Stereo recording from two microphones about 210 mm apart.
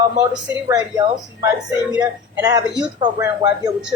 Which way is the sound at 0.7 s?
15° right (ahead or behind).